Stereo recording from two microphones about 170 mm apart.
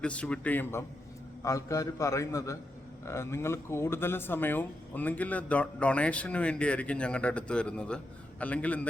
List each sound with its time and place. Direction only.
0.0 s speech: 5° left (ahead or behind)